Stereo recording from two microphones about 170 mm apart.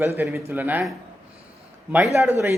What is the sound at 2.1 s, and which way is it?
Speech, 15° right (ahead or behind).